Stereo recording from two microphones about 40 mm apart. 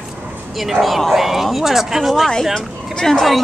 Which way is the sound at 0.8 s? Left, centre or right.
Centre.